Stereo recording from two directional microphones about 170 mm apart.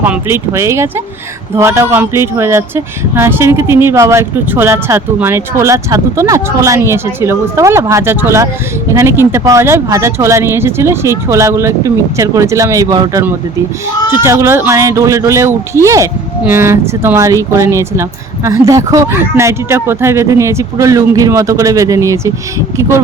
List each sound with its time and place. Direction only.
0.0 s speech: 10° right (ahead or behind)